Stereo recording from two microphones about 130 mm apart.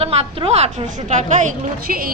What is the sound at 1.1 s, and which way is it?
Speech, 70° right (ahead or behind).